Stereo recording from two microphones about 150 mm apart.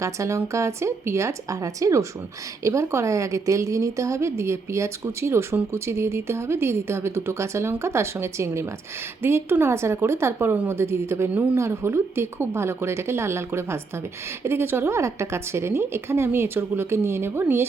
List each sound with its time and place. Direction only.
0.0 s a woman's voice: 20° right (ahead or behind)